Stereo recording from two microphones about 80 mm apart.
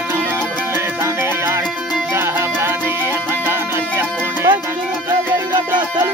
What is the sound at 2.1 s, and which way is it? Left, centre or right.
Music, right.